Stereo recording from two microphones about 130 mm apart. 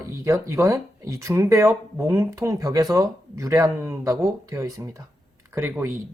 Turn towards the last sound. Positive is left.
turn(degrees=-15)  # may be behind; listen again after turning